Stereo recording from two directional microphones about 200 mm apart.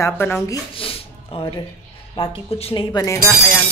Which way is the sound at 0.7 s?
25° left (ahead or behind).